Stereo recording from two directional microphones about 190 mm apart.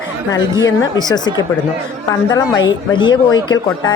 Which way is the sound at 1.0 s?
20° left (ahead or behind).